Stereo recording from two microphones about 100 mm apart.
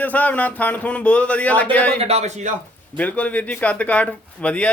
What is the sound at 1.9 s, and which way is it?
Speech, 90° right.